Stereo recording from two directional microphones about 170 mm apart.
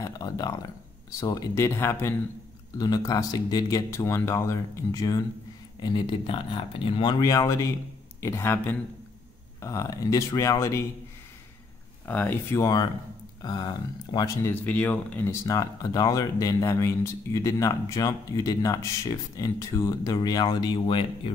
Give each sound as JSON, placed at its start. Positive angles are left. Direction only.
{"t": 0.0, "sound": "speech", "side_deg": 20}
{"t": 12.1, "sound": "speech", "side_deg": 10}